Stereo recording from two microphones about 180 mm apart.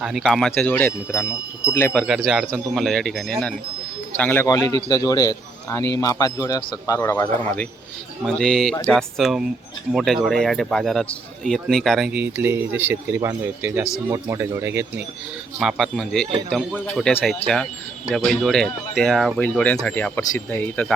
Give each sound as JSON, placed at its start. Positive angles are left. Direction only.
{"t": 0.0, "sound": "a man's voice", "side_deg": 0}
{"t": 2.0, "sound": "a man's voice", "side_deg": 0}
{"t": 8.2, "sound": "a man's voice", "side_deg": 0}
{"t": 15.5, "sound": "a man's voice", "side_deg": 0}